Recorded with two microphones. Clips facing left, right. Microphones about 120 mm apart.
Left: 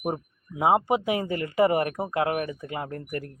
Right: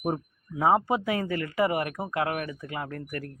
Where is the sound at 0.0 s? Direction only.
15° left (ahead or behind).